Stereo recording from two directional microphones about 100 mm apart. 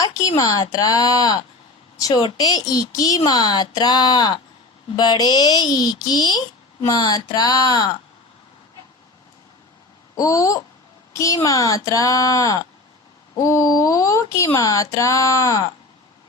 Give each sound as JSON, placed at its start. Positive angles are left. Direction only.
{"t": 0.0, "sound": "a woman's voice", "side_deg": 35}
{"t": 10.2, "sound": "a woman's voice", "side_deg": 35}